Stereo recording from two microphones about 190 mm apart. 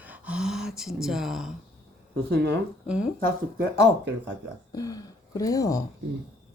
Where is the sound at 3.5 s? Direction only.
65° right (ahead or behind).